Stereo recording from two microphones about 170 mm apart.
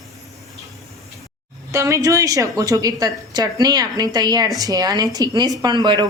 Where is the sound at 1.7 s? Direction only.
20° right (ahead or behind).